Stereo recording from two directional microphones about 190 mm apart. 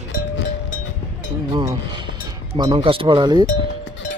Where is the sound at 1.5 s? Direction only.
15° right (ahead or behind).